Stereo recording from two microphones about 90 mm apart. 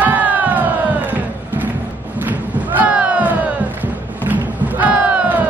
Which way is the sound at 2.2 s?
20° right (ahead or behind).